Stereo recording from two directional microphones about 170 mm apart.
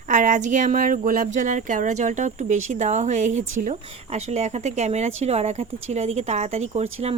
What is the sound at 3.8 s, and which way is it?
Speech, 35° right (ahead or behind).